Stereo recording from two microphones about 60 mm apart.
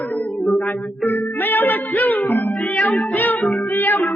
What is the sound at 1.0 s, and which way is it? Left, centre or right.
Music, left.